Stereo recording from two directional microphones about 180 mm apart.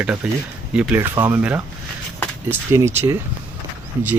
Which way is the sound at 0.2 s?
5° right (ahead or behind).